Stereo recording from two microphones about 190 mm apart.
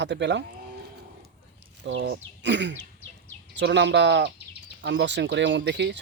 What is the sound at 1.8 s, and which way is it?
Speech, 70° right (ahead or behind).